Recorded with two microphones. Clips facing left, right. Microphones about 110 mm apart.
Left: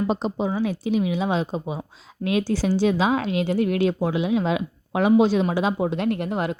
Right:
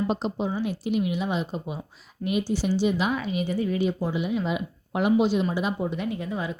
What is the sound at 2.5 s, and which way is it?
Speech, 90° left.